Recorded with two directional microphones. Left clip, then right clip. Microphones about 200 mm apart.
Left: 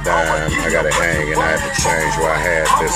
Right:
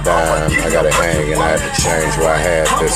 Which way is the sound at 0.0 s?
Centre (ahead or behind).